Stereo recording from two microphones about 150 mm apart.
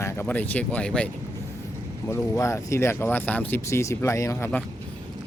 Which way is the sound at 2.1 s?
20° left (ahead or behind).